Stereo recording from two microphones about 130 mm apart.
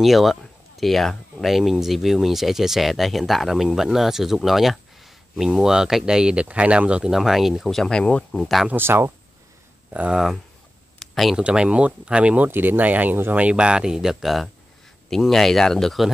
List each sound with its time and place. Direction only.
0.0 s speech: centre (ahead or behind)
8.6 s speech: 15° right (ahead or behind)
9.9 s speech: 5° right (ahead or behind)